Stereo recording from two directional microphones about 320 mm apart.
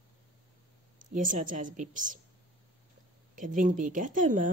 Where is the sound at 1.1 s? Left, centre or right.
Right.